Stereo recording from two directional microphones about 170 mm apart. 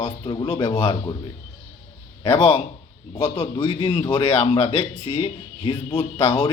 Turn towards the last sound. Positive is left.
turn(degrees=30)  # may be behind; listen again after turning